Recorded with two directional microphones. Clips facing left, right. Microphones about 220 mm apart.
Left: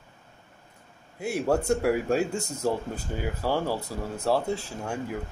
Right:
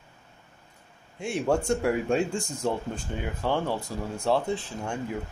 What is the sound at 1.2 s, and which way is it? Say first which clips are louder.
Speech: even; 5° left (ahead or behind).